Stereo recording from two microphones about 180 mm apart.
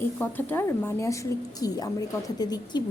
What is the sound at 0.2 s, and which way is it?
A woman's voice, 10° left (ahead or behind).